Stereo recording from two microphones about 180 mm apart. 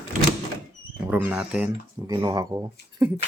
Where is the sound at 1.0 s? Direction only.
10° right (ahead or behind).